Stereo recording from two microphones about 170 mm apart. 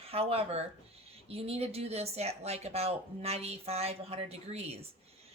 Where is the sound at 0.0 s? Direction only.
35° right (ahead or behind).